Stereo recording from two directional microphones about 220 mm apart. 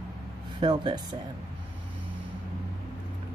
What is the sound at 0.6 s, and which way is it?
Speech, 20° right (ahead or behind).